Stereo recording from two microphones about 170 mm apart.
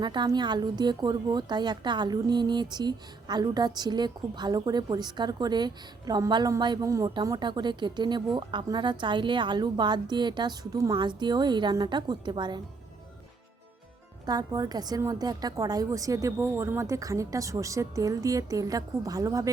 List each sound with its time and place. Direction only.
0.0 s speech: 25° right (ahead or behind)
14.3 s speech: 20° right (ahead or behind)